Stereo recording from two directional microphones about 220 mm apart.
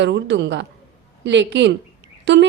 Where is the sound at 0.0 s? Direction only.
50° right (ahead or behind).